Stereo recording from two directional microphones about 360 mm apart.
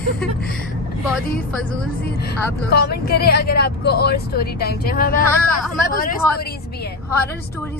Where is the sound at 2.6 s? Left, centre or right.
Left.